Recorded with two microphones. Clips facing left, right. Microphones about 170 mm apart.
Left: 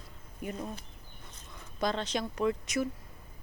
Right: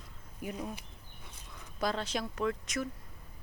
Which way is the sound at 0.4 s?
10° right (ahead or behind).